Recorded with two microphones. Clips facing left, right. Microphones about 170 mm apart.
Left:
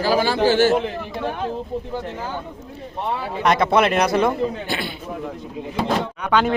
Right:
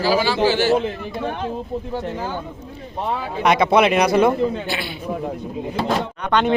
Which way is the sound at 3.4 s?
Centre (ahead or behind).